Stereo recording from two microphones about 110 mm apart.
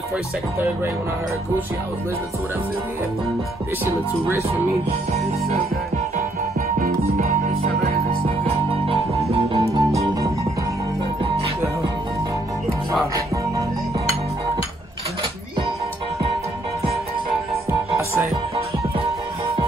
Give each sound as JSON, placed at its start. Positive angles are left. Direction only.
{"t": 8.5, "sound": "music", "side_deg": -60}